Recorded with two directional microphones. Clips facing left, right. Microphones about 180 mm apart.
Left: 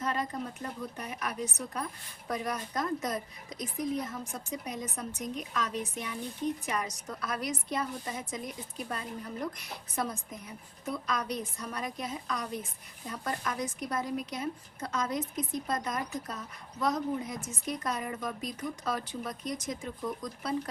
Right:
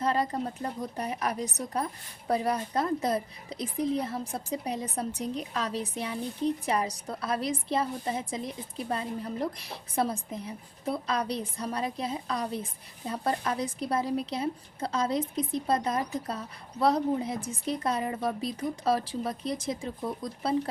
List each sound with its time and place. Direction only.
0.0 s a woman's voice: 35° right (ahead or behind)